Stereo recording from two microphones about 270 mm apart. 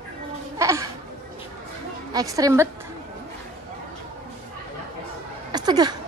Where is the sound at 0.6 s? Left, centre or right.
Centre.